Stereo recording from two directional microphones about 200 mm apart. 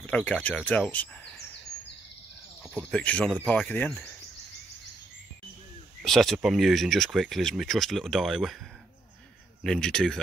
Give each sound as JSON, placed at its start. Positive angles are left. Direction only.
{"t": 0.0, "sound": "speech", "side_deg": 5}
{"t": 2.6, "sound": "speech", "side_deg": 5}
{"t": 6.0, "sound": "speech", "side_deg": 0}
{"t": 9.6, "sound": "speech", "side_deg": 5}